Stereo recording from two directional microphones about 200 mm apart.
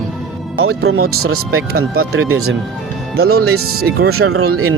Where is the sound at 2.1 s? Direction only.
90° right.